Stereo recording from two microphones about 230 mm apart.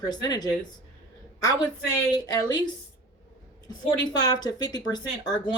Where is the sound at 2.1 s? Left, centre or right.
Centre.